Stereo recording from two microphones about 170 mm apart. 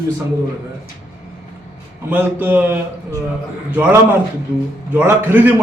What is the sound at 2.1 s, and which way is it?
A man's voice, 10° right (ahead or behind).